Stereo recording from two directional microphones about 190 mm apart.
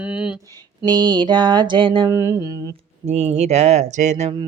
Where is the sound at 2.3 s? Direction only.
15° right (ahead or behind).